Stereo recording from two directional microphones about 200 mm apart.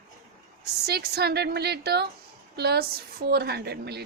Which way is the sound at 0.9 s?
55° right (ahead or behind).